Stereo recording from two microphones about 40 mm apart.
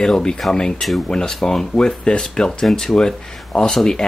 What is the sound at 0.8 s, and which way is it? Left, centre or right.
Speech, centre.